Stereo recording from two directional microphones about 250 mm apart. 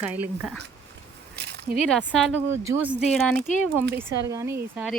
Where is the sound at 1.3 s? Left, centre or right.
Right.